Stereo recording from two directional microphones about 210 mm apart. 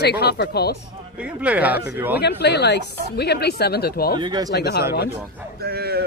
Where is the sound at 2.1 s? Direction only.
55° left (ahead or behind).